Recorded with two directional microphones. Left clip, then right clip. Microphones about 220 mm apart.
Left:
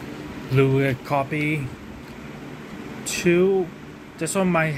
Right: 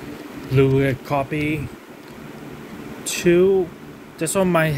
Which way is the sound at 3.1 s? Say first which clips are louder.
Right 3 dB; 20° right (ahead or behind).